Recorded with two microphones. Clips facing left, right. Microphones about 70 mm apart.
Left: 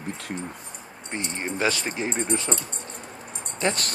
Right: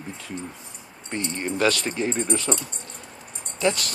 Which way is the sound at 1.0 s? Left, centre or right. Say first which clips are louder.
Right 2 dB; left.